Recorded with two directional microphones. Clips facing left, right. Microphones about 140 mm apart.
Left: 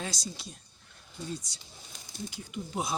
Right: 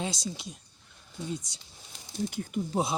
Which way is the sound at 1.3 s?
20° right (ahead or behind).